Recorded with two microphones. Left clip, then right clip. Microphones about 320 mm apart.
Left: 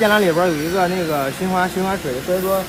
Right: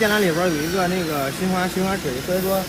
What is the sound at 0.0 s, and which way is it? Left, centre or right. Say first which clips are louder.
Speech: left 4 dB; left.